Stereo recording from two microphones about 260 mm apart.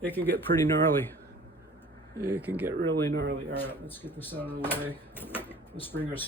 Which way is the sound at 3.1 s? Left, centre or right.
Right.